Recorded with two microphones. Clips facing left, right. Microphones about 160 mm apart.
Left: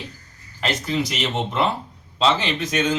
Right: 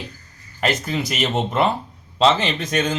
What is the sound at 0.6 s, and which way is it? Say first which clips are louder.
Speech: right 1 dB; 50° right (ahead or behind).